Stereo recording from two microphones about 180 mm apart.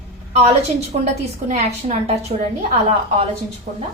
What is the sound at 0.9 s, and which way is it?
Speech, 35° right (ahead or behind).